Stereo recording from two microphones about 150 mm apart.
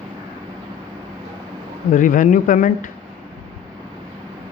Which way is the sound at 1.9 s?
65° left (ahead or behind).